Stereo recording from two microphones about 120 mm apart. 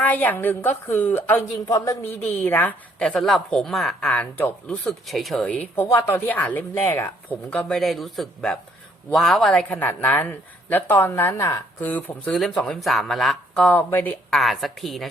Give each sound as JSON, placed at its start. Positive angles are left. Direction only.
{"t": 0.0, "sound": "speech", "side_deg": 15}
{"t": 1.6, "sound": "speech", "side_deg": 30}
{"t": 4.8, "sound": "speech", "side_deg": 0}
{"t": 7.8, "sound": "speech", "side_deg": 0}
{"t": 9.7, "sound": "speech", "side_deg": 15}
{"t": 14.3, "sound": "speech", "side_deg": 0}